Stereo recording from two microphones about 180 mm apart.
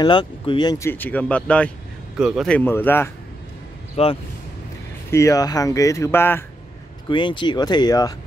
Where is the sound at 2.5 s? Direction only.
10° left (ahead or behind).